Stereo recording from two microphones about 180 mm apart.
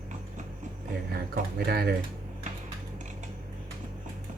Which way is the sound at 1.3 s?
60° right (ahead or behind).